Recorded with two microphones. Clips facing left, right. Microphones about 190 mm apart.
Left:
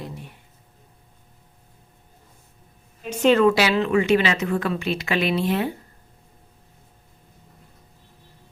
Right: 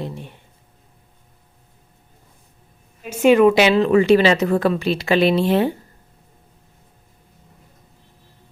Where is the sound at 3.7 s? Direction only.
35° right (ahead or behind).